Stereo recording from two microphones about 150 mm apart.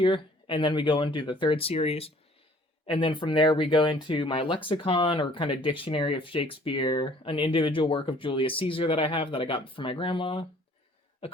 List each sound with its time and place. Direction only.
0.0 s speech: 35° left (ahead or behind)